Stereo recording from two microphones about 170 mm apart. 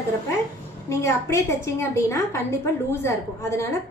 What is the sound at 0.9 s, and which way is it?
A woman's voice, 15° left (ahead or behind).